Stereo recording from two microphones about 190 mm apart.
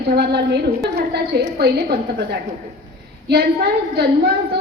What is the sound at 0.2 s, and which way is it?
A woman's voice, 60° right (ahead or behind).